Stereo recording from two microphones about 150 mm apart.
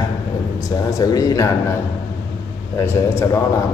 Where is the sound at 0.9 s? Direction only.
20° left (ahead or behind).